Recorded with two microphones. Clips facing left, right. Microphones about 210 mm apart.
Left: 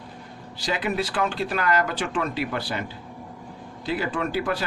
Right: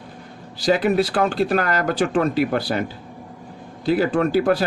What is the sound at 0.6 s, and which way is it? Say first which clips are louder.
Speech: right 9 dB; 40° right (ahead or behind).